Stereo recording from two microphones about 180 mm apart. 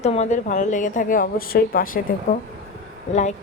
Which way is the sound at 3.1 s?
40° left (ahead or behind).